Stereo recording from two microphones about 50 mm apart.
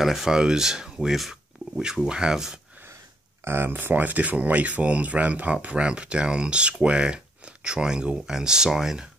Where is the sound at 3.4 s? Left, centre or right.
Right.